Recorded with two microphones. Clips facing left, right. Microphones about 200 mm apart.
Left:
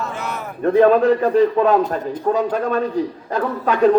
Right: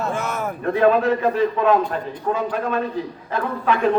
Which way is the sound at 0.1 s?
50° right (ahead or behind).